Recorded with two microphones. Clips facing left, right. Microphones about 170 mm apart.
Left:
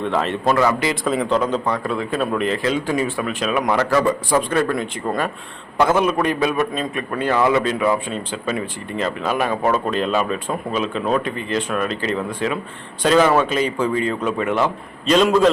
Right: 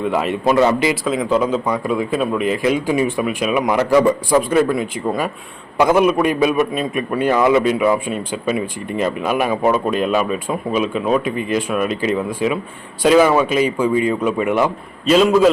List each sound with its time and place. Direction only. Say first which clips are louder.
0.0 s a man's voice: right 2 dB; 10° right (ahead or behind)
0.5 s speech: right 4 dB; 20° right (ahead or behind)
1.0 s a man's voice: right 2 dB; 5° right (ahead or behind)